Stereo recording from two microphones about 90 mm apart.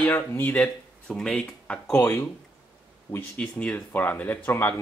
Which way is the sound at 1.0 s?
5° left (ahead or behind).